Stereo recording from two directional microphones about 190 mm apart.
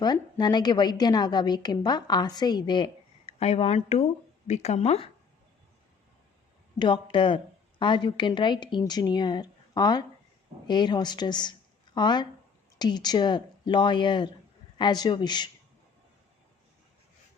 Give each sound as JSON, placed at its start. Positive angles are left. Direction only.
{"t": 0.0, "sound": "a woman's voice", "side_deg": 20}
{"t": 6.7, "sound": "a woman's voice", "side_deg": 25}